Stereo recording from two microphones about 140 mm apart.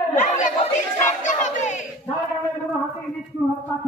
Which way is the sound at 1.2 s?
60° left (ahead or behind).